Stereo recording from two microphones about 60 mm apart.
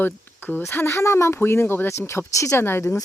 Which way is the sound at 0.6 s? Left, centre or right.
Left.